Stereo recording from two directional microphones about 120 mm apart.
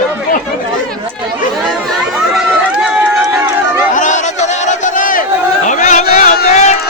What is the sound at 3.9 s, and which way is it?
Crowd, 90° left.